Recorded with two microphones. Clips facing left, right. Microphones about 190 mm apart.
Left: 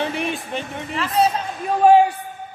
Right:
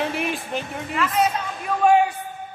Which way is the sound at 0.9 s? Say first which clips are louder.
Left 2 dB; 30° left (ahead or behind).